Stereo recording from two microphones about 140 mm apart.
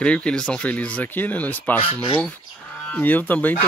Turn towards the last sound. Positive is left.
turn(degrees=10)  # may be behind; listen again after turning